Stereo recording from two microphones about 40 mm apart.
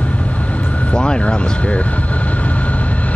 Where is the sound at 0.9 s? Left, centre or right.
Left.